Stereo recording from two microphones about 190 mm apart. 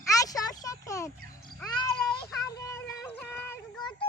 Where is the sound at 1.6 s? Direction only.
20° left (ahead or behind).